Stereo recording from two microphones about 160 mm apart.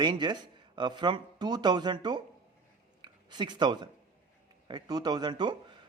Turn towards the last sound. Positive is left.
turn(degrees=-25)  # may be behind; listen again after turning